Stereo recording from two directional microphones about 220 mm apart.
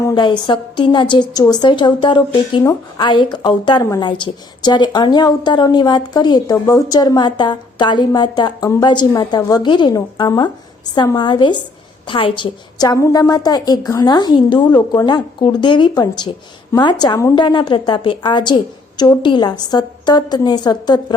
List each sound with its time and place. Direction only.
0.0 s a woman's voice: 20° left (ahead or behind)